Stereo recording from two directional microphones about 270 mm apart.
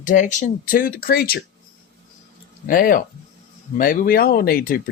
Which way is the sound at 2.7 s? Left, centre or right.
Left.